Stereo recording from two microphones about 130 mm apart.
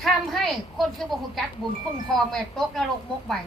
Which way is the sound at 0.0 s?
Centre (ahead or behind).